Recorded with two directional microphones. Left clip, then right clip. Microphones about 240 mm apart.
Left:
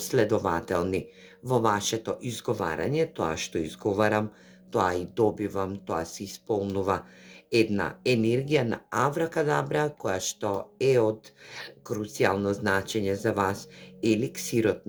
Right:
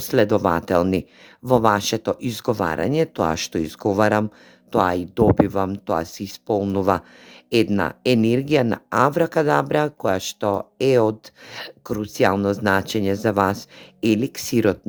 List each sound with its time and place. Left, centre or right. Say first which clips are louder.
0.0 s speech: right 7 dB; right